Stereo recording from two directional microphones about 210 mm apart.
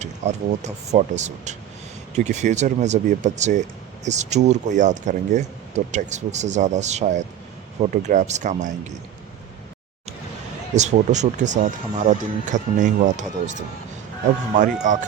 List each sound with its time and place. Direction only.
0.0 s speech: 35° right (ahead or behind)
10.8 s speech: 35° right (ahead or behind)